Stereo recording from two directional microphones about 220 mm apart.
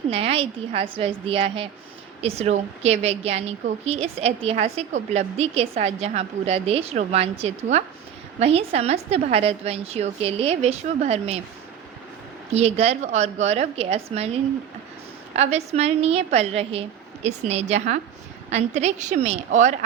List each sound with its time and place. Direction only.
0.1 s a woman's voice: 25° right (ahead or behind)
12.5 s a woman's voice: 30° right (ahead or behind)
15.3 s a woman's voice: 30° right (ahead or behind)